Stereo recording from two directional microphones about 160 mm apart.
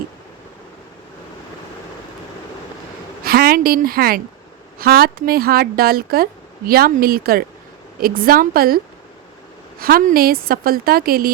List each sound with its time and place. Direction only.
3.2 s a woman's voice: 70° right (ahead or behind)